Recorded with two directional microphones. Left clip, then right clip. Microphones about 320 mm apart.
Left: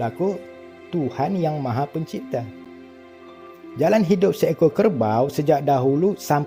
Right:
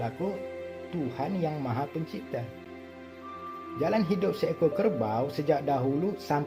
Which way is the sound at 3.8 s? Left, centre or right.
Left.